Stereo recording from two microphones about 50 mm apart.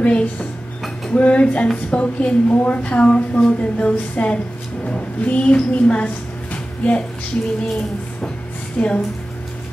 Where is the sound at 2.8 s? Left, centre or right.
Left.